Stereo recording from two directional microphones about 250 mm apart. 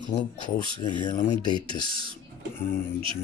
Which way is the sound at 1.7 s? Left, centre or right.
Left.